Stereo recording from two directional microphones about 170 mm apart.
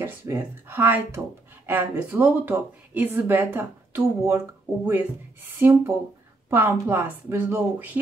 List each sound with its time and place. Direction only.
0.0 s a woman's voice: 15° right (ahead or behind)